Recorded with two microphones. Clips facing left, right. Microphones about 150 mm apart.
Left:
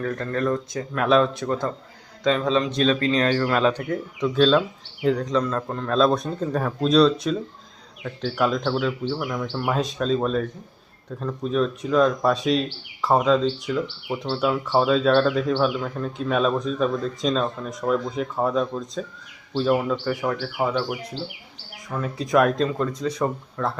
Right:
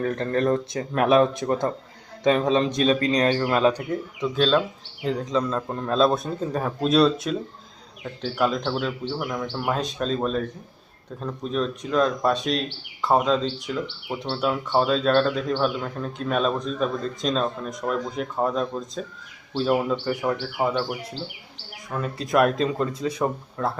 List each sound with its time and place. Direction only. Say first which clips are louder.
0.3 s speech: right 2 dB; 30° right (ahead or behind); by 3.8 s 15° right (ahead or behind)
4.2 s speech: left 3 dB; centre (ahead or behind)
5.4 s a man's voice: left 1 dB; 15° right (ahead or behind)
8.4 s speech: left 1 dB; centre (ahead or behind)
21.8 s speech: left 1 dB; centre (ahead or behind)